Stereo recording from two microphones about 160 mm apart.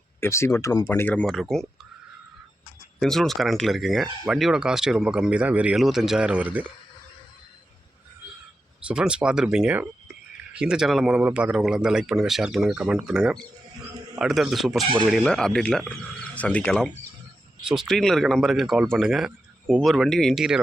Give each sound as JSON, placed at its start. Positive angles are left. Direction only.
{"t": 0.2, "sound": "speech", "side_deg": 15}
{"t": 3.0, "sound": "speech", "side_deg": 0}
{"t": 8.9, "sound": "speech", "side_deg": -5}